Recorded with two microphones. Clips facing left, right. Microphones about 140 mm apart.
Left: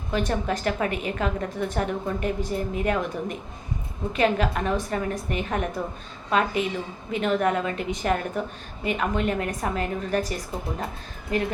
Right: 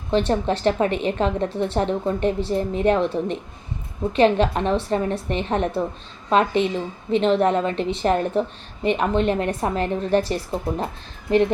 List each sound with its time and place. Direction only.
0.3 s a woman's voice: 30° right (ahead or behind)